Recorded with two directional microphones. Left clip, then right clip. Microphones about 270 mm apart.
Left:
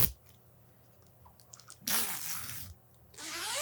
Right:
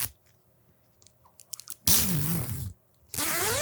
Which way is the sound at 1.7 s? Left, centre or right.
Right.